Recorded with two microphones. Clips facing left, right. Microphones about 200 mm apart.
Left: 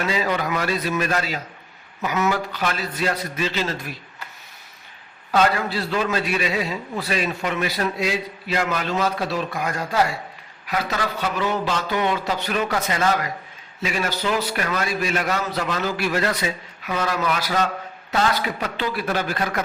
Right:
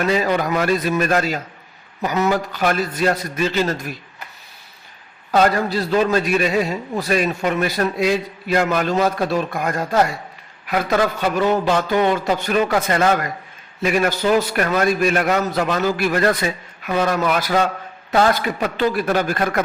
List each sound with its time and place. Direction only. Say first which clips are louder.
0.0 s a man's voice: right 5 dB; 50° right (ahead or behind)
2.0 s a man's voice: right 3 dB; 35° right (ahead or behind)
5.3 s a man's voice: right 3 dB; 45° right (ahead or behind)